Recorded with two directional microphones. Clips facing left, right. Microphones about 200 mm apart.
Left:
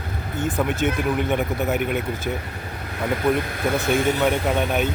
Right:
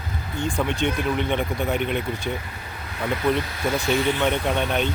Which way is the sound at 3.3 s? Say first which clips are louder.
Left 1 dB; 55° left (ahead or behind).